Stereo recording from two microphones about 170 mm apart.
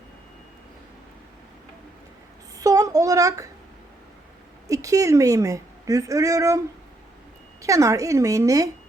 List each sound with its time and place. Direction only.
2.6 s a sound: 20° right (ahead or behind)
4.7 s a woman's voice: 20° right (ahead or behind)
7.6 s a woman's voice: 20° right (ahead or behind)